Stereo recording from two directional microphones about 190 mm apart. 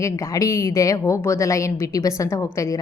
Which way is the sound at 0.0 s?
15° left (ahead or behind).